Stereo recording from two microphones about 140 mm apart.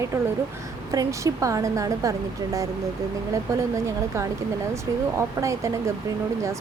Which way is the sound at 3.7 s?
20° right (ahead or behind).